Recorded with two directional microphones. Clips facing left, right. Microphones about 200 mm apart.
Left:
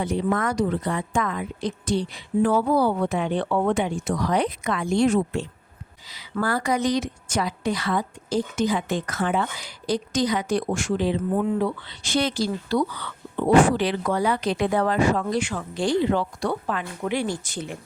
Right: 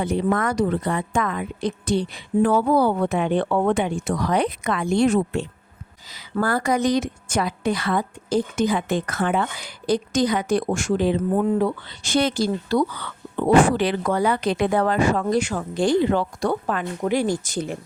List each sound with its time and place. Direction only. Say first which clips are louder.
0.0 s a woman's voice: right 2 dB; 55° right (ahead or behind)
6.1 s a woman's voice: right 3 dB; 45° right (ahead or behind)